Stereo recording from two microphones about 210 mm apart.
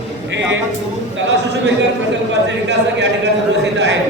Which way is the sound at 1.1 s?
55° right (ahead or behind).